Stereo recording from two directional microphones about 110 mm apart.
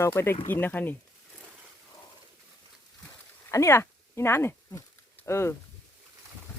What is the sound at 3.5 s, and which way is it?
Speech, 25° left (ahead or behind).